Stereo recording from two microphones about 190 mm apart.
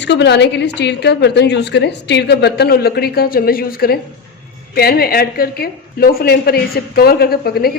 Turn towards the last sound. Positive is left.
turn(degrees=55)  # may be behind; listen again after turning